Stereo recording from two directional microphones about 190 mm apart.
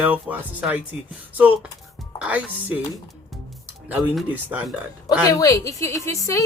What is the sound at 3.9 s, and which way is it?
Speech, 10° right (ahead or behind).